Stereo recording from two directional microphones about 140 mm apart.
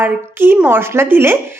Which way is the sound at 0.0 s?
15° right (ahead or behind).